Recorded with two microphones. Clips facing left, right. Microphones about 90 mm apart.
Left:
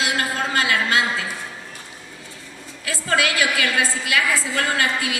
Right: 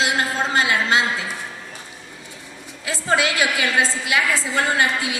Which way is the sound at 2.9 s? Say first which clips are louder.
Right 1 dB; 25° right (ahead or behind).